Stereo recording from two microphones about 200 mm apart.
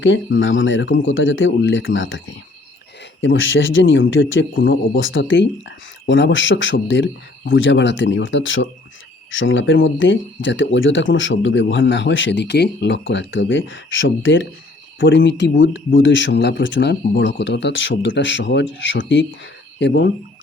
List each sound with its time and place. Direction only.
0.0 s speech: 70° left (ahead or behind)